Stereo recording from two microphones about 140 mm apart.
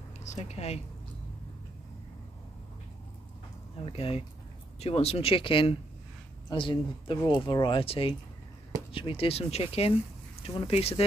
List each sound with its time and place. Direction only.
0.2 s speech: 55° left (ahead or behind)
3.9 s speech: 45° left (ahead or behind)